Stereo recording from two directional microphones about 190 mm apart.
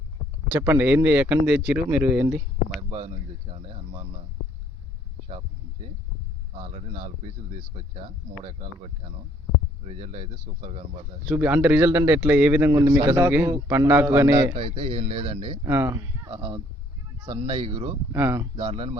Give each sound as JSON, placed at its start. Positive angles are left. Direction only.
{"t": 0.5, "sound": "speech", "side_deg": -10}
{"t": 3.5, "sound": "speech", "side_deg": -30}
{"t": 6.7, "sound": "speech", "side_deg": -35}
{"t": 9.8, "sound": "speech", "side_deg": -30}
{"t": 11.3, "sound": "speech", "side_deg": -10}
{"t": 14.5, "sound": "speech", "side_deg": -30}
{"t": 15.6, "sound": "speech", "side_deg": -15}
{"t": 16.3, "sound": "speech", "side_deg": -30}
{"t": 18.1, "sound": "speech", "side_deg": -15}
{"t": 18.5, "sound": "speech", "side_deg": -30}